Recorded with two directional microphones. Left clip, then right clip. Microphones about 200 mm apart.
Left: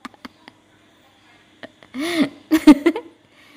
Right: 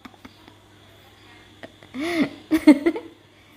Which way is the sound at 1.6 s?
15° left (ahead or behind).